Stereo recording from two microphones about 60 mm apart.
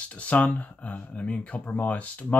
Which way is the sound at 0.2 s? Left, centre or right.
Left.